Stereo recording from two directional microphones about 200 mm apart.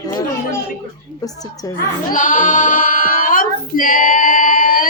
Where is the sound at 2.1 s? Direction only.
40° left (ahead or behind).